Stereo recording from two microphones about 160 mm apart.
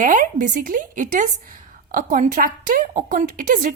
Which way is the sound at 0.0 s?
55° right (ahead or behind).